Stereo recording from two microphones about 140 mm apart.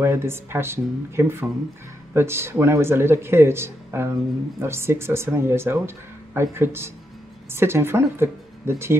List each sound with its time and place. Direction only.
0.0 s speech: 15° right (ahead or behind)